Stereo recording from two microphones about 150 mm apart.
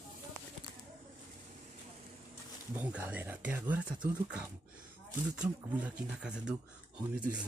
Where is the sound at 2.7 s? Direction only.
10° right (ahead or behind).